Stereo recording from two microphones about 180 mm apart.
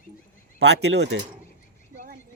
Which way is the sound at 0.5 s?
70° right (ahead or behind).